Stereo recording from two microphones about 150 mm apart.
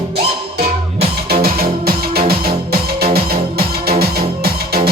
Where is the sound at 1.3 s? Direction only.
90° right.